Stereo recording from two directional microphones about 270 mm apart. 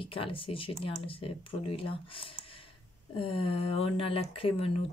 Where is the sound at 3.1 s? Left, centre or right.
Centre.